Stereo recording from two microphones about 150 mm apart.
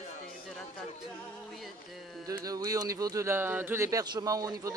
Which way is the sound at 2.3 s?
25° right (ahead or behind).